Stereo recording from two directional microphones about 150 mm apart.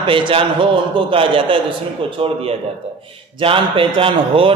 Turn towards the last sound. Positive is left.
turn(degrees=-35)  # may be behind; listen again after turning